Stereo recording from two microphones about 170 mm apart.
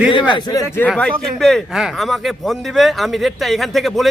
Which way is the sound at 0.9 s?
5° left (ahead or behind).